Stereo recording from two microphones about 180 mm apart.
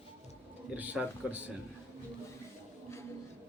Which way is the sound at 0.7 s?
10° right (ahead or behind).